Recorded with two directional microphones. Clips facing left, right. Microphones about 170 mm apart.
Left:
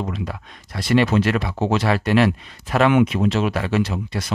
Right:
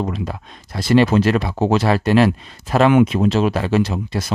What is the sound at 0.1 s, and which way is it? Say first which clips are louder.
Speech: right 3 dB; 35° right (ahead or behind).